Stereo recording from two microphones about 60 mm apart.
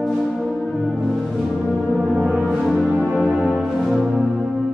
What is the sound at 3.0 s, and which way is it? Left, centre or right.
Music, left.